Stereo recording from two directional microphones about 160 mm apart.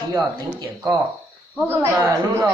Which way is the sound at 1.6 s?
15° right (ahead or behind).